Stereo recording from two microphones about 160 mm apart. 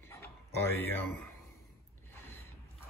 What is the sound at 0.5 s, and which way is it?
Speech, 15° left (ahead or behind).